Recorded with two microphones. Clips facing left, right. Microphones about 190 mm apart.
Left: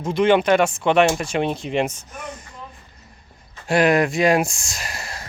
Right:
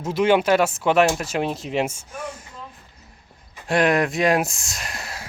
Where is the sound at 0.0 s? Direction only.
5° right (ahead or behind).